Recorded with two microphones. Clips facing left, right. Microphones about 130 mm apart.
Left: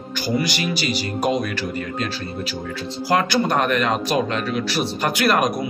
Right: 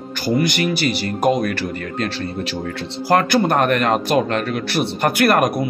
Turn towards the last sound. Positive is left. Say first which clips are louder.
# right 3 dB
turn(degrees=-55)  # may be behind; listen again after turning